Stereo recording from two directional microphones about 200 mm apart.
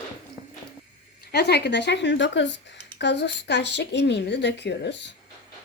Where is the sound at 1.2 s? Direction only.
55° left (ahead or behind).